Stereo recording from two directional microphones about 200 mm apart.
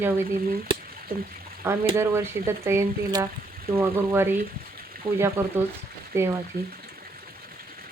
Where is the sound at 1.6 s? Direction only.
15° right (ahead or behind).